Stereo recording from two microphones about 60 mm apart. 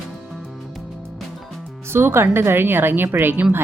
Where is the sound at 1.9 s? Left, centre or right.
Right.